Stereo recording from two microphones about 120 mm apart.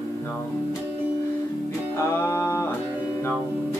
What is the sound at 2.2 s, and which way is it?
Music, 20° left (ahead or behind).